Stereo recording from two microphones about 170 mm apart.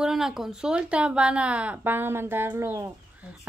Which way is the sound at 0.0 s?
Centre (ahead or behind).